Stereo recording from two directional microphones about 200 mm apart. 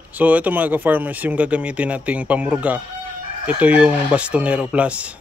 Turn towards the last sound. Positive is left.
turn(degrees=-5)  # may be behind; listen again after turning